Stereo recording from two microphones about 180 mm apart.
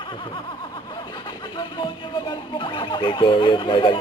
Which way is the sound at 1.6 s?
25° left (ahead or behind).